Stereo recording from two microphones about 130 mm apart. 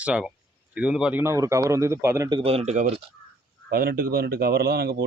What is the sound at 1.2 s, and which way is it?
Speech, 20° right (ahead or behind).